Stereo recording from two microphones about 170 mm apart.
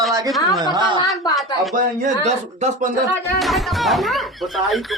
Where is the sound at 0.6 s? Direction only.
25° right (ahead or behind).